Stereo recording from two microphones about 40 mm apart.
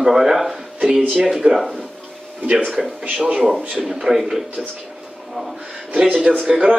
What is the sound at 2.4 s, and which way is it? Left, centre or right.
Speech, right.